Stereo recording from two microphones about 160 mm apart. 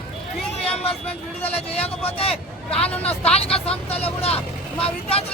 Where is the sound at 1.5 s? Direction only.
35° left (ahead or behind).